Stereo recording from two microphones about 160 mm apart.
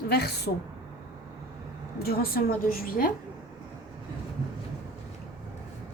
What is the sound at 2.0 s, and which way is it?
A woman's voice, 70° left (ahead or behind).